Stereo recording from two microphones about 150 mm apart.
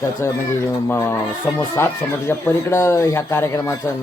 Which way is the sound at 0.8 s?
15° left (ahead or behind).